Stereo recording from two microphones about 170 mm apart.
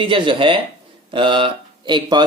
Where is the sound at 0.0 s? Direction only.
30° right (ahead or behind).